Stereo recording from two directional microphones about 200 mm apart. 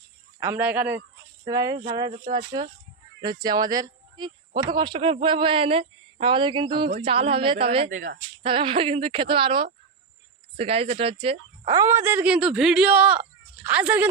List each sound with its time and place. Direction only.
0.3 s a woman's voice: 10° right (ahead or behind); by 7.9 s 30° right (ahead or behind)
7.9 s speech: 65° right (ahead or behind)
8.4 s a woman's voice: 25° right (ahead or behind); by 14.1 s 10° right (ahead or behind)